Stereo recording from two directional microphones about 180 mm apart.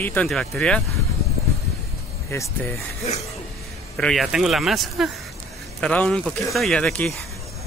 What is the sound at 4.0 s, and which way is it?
Speech, centre (ahead or behind).